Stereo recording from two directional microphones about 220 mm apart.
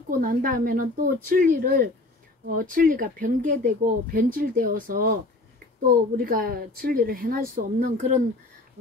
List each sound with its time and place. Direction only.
0.2 s speech: 40° right (ahead or behind)
6.1 s speech: 40° right (ahead or behind)